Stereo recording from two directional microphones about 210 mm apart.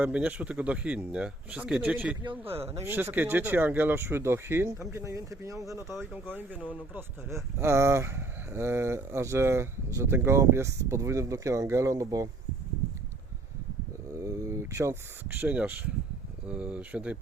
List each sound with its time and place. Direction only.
0.0 s speech: 5° right (ahead or behind)
2.4 s speech: 25° right (ahead or behind)
2.8 s speech: 10° right (ahead or behind)
14.2 s speech: 15° right (ahead or behind)